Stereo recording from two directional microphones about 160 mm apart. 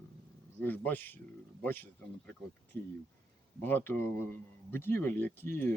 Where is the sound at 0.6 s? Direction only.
10° left (ahead or behind).